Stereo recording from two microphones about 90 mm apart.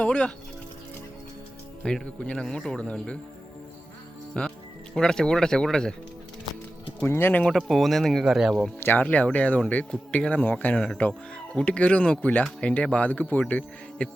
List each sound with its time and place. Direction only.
0.0 s speech: 10° left (ahead or behind)
1.8 s speech: 10° left (ahead or behind)
4.4 s speech: 10° left (ahead or behind)
7.1 s speech: 25° left (ahead or behind)
7.4 s speech: centre (ahead or behind)
8.8 s speech: 20° left (ahead or behind)